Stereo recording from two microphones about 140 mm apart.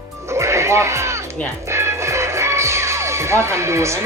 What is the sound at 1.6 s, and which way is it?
Music, 20° right (ahead or behind).